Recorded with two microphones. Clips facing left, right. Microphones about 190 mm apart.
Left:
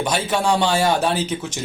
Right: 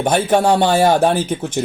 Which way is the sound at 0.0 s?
50° right (ahead or behind).